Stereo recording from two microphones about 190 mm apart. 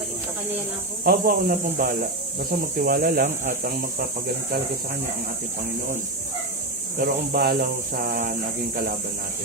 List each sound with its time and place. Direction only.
1.0 s speech: 50° right (ahead or behind)
7.0 s speech: 55° right (ahead or behind)